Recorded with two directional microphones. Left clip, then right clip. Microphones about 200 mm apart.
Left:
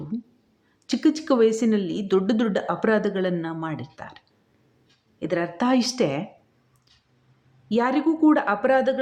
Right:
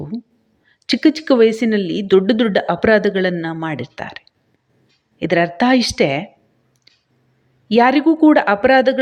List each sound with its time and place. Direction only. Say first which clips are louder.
0.9 s speech: right 7 dB; 15° right (ahead or behind)
5.2 s speech: right 9 dB; 20° right (ahead or behind)
7.7 s speech: right 9 dB; 20° right (ahead or behind)